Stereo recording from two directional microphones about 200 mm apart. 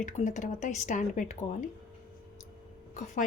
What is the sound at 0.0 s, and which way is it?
Speech, 40° left (ahead or behind).